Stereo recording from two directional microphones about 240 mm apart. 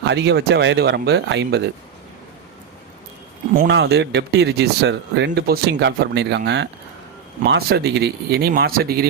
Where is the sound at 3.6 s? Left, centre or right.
Right.